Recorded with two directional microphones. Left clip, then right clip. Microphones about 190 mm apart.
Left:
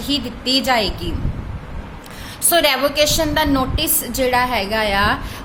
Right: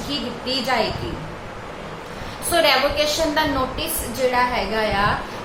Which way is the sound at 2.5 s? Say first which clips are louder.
Left 2 dB; 60° left (ahead or behind).